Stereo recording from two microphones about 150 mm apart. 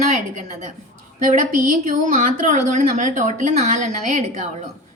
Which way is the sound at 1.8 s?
55° right (ahead or behind).